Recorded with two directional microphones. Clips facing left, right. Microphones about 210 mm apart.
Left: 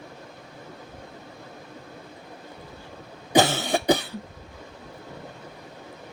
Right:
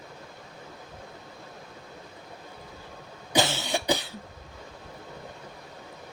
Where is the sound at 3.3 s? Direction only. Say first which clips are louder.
Left 6 dB; 55° left (ahead or behind).